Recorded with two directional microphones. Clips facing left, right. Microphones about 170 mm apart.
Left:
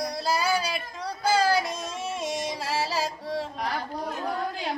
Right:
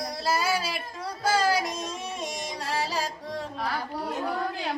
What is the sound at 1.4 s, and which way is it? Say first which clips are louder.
Child singing: left 1 dB; centre (ahead or behind).